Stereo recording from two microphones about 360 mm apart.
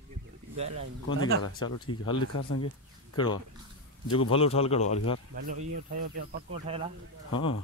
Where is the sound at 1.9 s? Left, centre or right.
Left.